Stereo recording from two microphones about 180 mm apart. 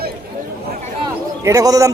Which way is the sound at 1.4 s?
20° right (ahead or behind).